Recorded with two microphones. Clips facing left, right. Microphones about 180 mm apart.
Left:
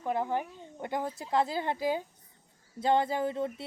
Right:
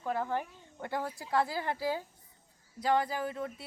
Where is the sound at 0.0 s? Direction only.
15° left (ahead or behind).